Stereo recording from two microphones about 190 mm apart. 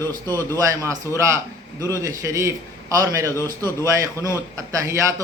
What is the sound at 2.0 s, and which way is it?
A man's voice, 15° right (ahead or behind).